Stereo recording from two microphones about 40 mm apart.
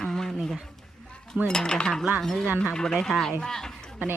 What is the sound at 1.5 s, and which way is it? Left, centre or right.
Cutlery, centre.